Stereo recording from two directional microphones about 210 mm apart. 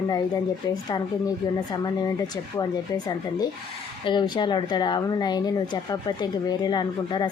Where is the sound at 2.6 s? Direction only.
20° left (ahead or behind).